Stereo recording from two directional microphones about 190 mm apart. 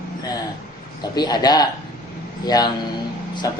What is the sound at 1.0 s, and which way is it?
A man's voice, 20° left (ahead or behind).